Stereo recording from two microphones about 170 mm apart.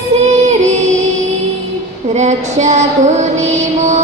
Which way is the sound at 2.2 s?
40° right (ahead or behind).